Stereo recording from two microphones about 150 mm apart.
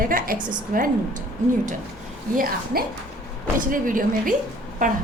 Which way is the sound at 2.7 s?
80° right.